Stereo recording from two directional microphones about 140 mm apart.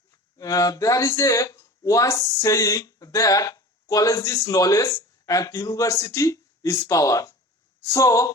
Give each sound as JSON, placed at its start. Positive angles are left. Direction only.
{"t": 0.1, "sound": "speech", "side_deg": 25}